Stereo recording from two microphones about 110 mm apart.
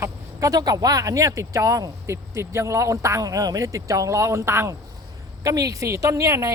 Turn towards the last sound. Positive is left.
turn(degrees=-30)  # may be behind; listen again after turning